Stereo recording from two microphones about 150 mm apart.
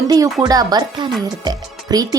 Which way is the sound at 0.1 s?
25° right (ahead or behind).